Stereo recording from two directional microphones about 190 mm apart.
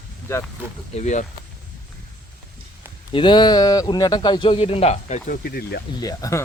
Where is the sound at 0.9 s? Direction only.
40° left (ahead or behind).